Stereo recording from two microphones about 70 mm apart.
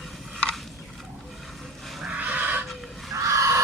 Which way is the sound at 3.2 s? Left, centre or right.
Right.